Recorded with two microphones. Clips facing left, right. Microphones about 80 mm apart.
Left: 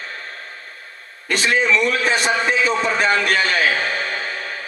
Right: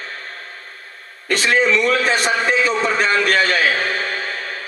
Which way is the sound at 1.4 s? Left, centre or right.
Right.